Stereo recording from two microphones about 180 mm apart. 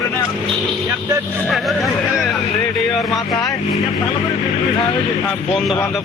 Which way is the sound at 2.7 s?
Centre (ahead or behind).